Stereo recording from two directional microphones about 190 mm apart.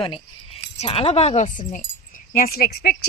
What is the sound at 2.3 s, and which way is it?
Speech, 50° left (ahead or behind).